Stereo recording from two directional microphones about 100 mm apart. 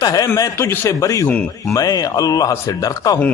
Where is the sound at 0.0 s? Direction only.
40° left (ahead or behind).